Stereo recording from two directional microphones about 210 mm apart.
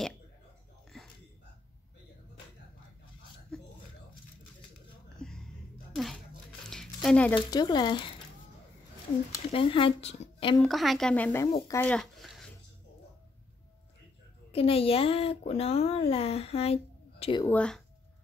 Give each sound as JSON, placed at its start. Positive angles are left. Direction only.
{"t": 0.9, "sound": "a sound", "side_deg": 0}
{"t": 3.5, "sound": "a sound", "side_deg": 5}
{"t": 5.2, "sound": "music", "side_deg": 5}
{"t": 5.9, "sound": "a sound", "side_deg": 0}
{"t": 7.3, "sound": "speech", "side_deg": 20}
{"t": 9.5, "sound": "speech", "side_deg": 25}
{"t": 10.6, "sound": "speech", "side_deg": 0}
{"t": 14.5, "sound": "speech", "side_deg": 25}
{"t": 17.4, "sound": "speech", "side_deg": 5}